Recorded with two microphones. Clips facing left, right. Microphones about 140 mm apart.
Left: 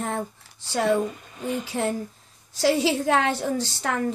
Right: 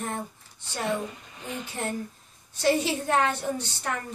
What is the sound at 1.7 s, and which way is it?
A woman's voice, 90° left.